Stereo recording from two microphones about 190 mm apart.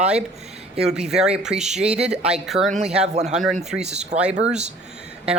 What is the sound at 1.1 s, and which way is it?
Speech, 5° right (ahead or behind).